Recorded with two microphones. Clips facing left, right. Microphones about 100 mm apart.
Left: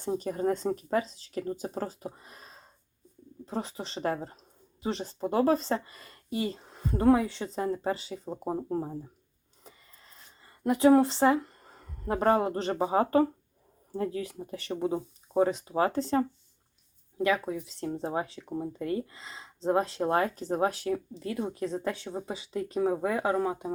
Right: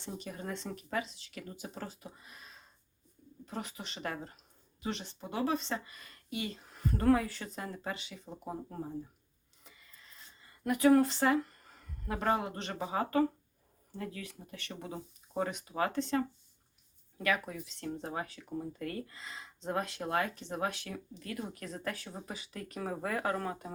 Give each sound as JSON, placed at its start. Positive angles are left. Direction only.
{"t": 0.0, "sound": "speech", "side_deg": 40}
{"t": 10.6, "sound": "speech", "side_deg": 25}
{"t": 17.2, "sound": "speech", "side_deg": 20}
{"t": 22.8, "sound": "speech", "side_deg": 15}